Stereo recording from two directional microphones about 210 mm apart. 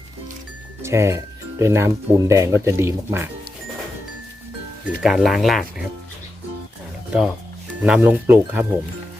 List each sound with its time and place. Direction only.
0.8 s speech: 15° right (ahead or behind)
5.0 s speech: centre (ahead or behind)
7.1 s speech: 5° right (ahead or behind)